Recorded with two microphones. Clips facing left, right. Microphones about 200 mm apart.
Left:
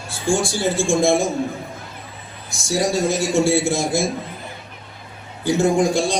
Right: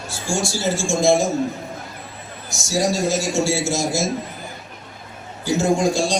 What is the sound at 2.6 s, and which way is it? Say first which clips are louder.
A man's voice: left 1 dB; 55° left (ahead or behind).